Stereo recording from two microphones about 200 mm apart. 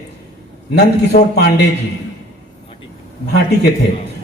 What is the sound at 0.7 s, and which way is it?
Speech, 55° left (ahead or behind).